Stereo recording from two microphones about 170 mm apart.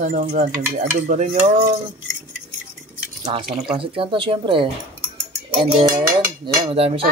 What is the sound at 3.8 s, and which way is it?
Speech, 30° right (ahead or behind).